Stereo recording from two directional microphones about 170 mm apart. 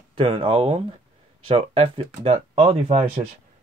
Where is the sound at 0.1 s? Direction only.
30° right (ahead or behind).